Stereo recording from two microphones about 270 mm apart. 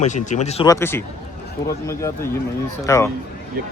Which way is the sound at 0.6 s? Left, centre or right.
Centre.